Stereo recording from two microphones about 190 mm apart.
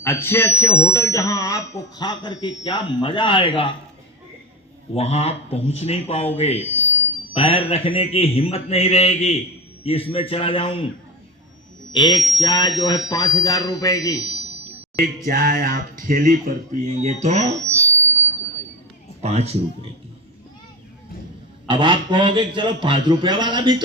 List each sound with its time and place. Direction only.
0.0 s speech: 10° left (ahead or behind); by 3.7 s 25° left (ahead or behind)
4.9 s a man's voice: 35° left (ahead or behind)
11.9 s speech: 20° left (ahead or behind)
15.3 s speech: 50° right (ahead or behind)
19.2 s a man's voice: 35° right (ahead or behind)
21.7 s speech: 25° right (ahead or behind)